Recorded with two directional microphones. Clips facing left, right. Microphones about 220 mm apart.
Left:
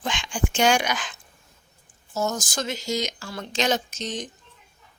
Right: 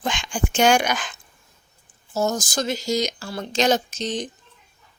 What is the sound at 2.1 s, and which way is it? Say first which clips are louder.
Speech: right 4 dB; 35° right (ahead or behind).